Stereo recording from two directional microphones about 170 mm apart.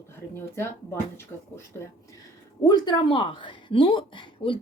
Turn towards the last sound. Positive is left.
turn(degrees=30)  # may be behind; listen again after turning